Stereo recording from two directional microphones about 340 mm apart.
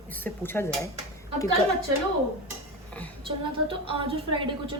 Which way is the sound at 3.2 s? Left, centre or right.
Centre.